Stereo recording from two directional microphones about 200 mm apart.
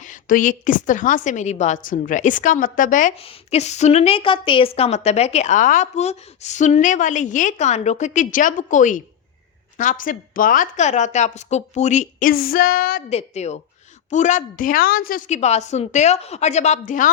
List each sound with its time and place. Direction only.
0.0 s a woman's voice: 40° left (ahead or behind)
3.2 s a woman's voice: 30° left (ahead or behind); by 13.0 s 45° left (ahead or behind)
13.1 s a woman's voice: 35° left (ahead or behind)